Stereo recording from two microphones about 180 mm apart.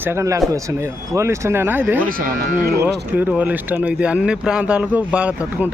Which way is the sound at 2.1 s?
50° right (ahead or behind).